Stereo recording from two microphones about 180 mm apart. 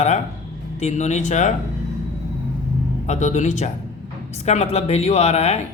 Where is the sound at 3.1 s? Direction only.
40° left (ahead or behind).